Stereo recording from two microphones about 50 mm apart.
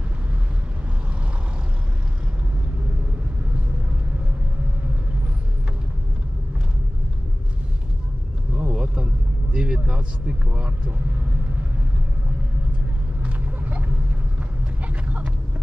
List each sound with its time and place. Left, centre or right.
8.5 s vehicle: right
11.1 s speech: right
13.2 s vehicle: right